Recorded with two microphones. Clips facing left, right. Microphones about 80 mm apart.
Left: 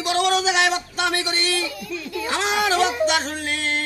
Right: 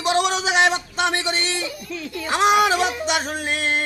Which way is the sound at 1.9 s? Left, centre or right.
Centre.